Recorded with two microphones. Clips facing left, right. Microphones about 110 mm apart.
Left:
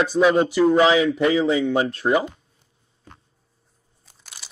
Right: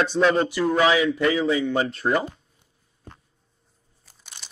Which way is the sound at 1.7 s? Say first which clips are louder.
Left 3 dB; 5° left (ahead or behind).